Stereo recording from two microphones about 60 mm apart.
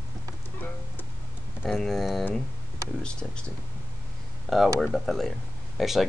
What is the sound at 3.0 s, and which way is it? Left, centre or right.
Speech, centre.